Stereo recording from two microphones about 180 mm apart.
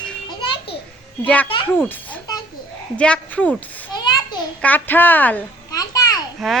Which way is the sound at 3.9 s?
25° left (ahead or behind).